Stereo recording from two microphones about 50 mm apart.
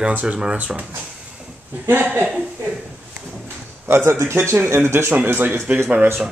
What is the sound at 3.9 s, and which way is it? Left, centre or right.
A man's voice, right.